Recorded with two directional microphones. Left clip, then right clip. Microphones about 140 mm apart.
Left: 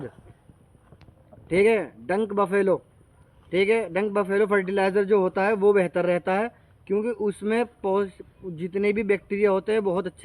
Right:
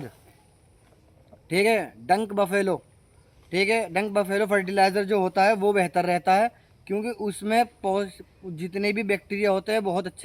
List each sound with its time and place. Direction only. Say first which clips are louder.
1.5 s speech: left 2 dB; 50° right (ahead or behind)